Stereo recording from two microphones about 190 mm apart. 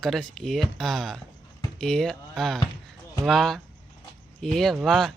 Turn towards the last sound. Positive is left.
turn(degrees=0)  # may be behind; listen again after turning